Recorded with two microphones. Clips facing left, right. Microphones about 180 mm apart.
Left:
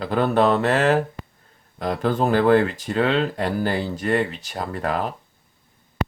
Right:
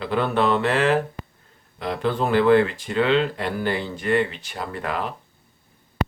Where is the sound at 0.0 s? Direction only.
40° left (ahead or behind).